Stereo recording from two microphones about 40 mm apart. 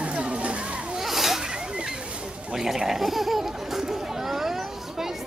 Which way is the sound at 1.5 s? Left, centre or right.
Right.